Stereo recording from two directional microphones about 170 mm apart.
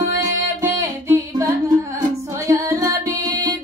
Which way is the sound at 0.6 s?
15° right (ahead or behind).